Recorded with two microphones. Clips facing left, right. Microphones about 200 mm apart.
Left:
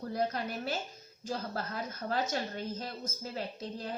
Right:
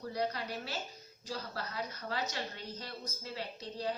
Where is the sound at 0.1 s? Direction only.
50° left (ahead or behind).